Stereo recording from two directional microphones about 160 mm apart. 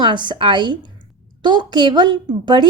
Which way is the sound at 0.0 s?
30° right (ahead or behind).